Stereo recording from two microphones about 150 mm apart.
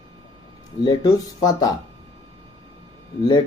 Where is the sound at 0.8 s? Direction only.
25° left (ahead or behind).